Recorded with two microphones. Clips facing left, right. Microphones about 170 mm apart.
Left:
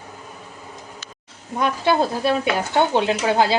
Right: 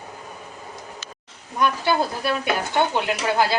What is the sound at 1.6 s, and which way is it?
Speech, 25° left (ahead or behind).